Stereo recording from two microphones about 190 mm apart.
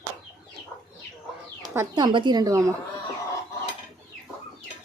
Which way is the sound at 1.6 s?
20° right (ahead or behind).